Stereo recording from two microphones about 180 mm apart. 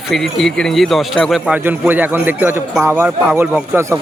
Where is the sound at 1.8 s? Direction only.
10° right (ahead or behind).